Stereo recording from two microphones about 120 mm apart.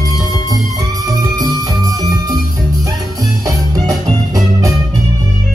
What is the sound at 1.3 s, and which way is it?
Music, 30° right (ahead or behind).